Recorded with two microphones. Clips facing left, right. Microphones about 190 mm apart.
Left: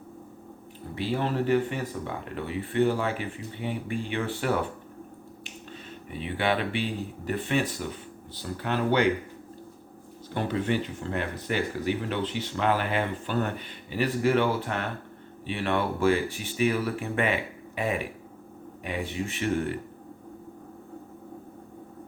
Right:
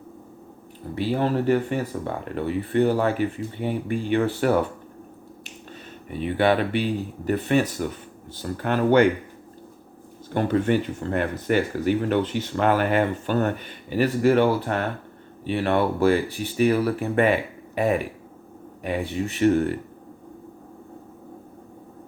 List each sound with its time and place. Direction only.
0.9 s speech: 45° right (ahead or behind)
6.1 s speech: 45° right (ahead or behind)
10.3 s speech: 50° right (ahead or behind)